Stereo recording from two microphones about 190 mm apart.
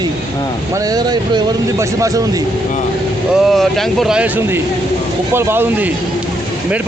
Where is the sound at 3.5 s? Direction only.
Centre (ahead or behind).